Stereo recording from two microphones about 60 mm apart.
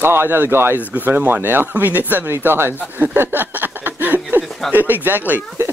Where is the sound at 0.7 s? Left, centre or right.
Right.